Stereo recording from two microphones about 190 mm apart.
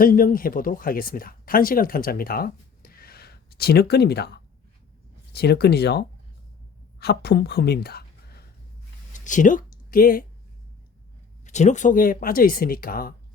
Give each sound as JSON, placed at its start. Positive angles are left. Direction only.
{"t": 0.0, "sound": "a woman's voice", "side_deg": 45}
{"t": 9.1, "sound": "speech", "side_deg": 40}
{"t": 11.4, "sound": "speech", "side_deg": 40}